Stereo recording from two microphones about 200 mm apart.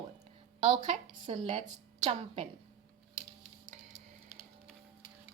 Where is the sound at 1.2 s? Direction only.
25° right (ahead or behind).